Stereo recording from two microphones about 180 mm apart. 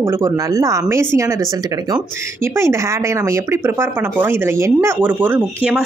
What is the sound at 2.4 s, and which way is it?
Speech, 15° right (ahead or behind).